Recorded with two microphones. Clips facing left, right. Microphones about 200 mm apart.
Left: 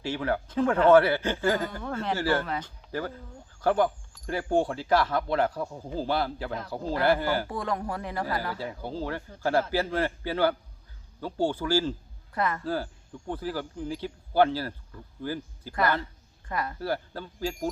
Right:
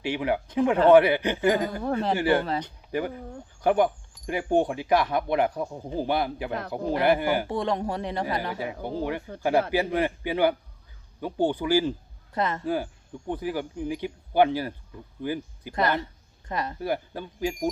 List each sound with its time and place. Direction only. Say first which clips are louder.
0.0 s a man's voice: right 2 dB; 15° right (ahead or behind)